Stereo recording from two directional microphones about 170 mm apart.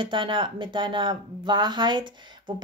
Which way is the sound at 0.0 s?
30° right (ahead or behind).